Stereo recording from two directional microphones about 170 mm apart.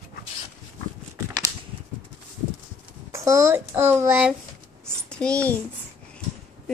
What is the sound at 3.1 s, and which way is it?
A child's voice, 15° right (ahead or behind).